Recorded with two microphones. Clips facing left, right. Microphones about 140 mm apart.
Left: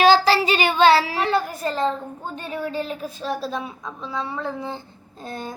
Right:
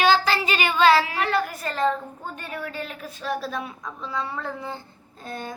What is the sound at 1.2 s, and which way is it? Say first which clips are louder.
Speech: left 3 dB; 25° left (ahead or behind).